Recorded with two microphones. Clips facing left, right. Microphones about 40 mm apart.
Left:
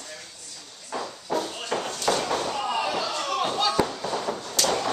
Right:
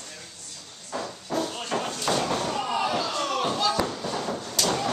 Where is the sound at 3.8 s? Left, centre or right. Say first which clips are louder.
Left 1 dB; centre.